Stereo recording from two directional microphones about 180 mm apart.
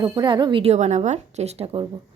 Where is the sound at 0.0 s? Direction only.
25° right (ahead or behind).